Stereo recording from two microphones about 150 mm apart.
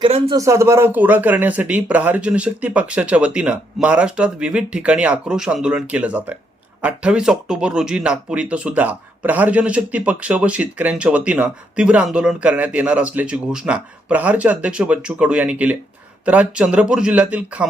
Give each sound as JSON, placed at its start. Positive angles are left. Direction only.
{"t": 0.0, "sound": "a man's voice", "side_deg": -35}
{"t": 0.3, "sound": "speech", "side_deg": -20}